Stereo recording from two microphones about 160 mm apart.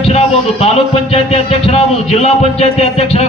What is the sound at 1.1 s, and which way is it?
A man's voice, 40° left (ahead or behind).